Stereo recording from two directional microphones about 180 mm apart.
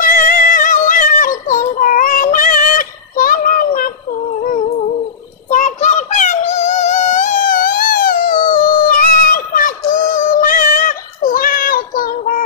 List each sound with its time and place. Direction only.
0.0 s synthetic singing: 50° left (ahead or behind)
5.5 s synthetic singing: 45° left (ahead or behind)